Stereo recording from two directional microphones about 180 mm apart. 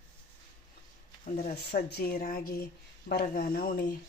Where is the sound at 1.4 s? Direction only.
60° left (ahead or behind).